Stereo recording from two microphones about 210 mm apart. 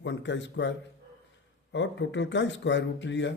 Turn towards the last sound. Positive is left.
turn(degrees=60)  # may be behind; listen again after turning